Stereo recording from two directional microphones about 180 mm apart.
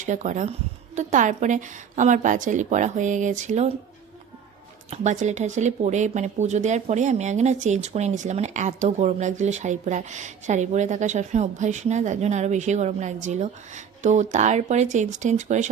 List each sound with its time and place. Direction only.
0.0 s a woman's voice: 45° right (ahead or behind)
4.9 s speech: 40° right (ahead or behind)